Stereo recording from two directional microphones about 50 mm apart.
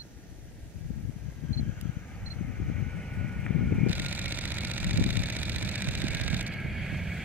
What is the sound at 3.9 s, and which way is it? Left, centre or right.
Vehicle, right.